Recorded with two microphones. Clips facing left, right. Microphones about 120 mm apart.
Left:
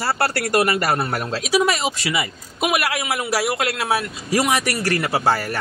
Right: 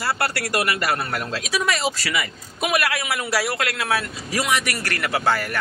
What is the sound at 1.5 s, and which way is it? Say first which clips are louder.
A man's voice: left 5 dB; 25° left (ahead or behind).